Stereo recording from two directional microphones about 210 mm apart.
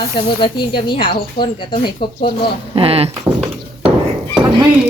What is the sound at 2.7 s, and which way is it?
Speech, 25° right (ahead or behind).